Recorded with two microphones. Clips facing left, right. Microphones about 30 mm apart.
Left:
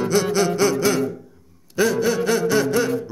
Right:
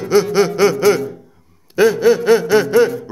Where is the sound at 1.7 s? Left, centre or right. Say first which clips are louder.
Right 7 dB; right.